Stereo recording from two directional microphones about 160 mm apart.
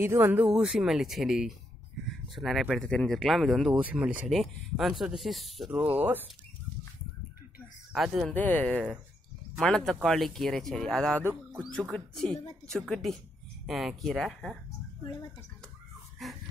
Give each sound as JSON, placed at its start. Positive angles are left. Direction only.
{"t": 0.0, "sound": "speech", "side_deg": -15}
{"t": 2.0, "sound": "a sound", "side_deg": 0}
{"t": 2.7, "sound": "speech", "side_deg": 5}
{"t": 7.9, "sound": "speech", "side_deg": 0}
{"t": 8.4, "sound": "speech", "side_deg": 10}
{"t": 16.2, "sound": "a sound", "side_deg": 0}